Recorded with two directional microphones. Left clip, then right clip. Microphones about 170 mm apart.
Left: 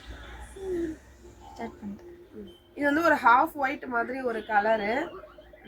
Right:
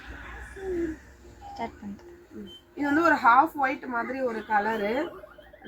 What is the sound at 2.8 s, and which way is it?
A woman's voice, 50° left (ahead or behind).